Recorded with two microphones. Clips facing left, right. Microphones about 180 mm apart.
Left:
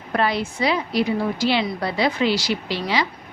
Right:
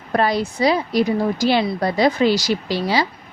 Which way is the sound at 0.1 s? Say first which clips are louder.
Right 3 dB; 40° right (ahead or behind).